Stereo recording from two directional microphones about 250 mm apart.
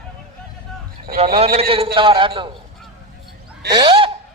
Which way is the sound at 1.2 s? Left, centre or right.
Right.